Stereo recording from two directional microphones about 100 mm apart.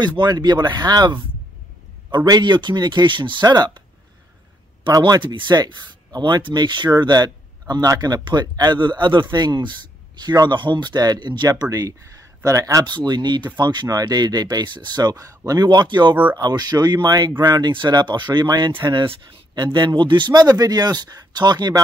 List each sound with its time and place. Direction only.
0.2 s speech: 45° right (ahead or behind)
4.8 s speech: 45° right (ahead or behind)
8.2 s speech: 50° right (ahead or behind)
12.8 s speech: 45° right (ahead or behind)